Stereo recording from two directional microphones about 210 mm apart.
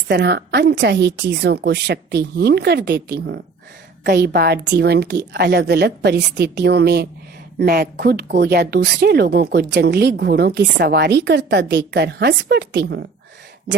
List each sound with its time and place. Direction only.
0.1 s speech: 50° right (ahead or behind)